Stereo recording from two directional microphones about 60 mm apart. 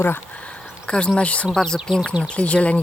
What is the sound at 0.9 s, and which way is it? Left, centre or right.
Speech, centre.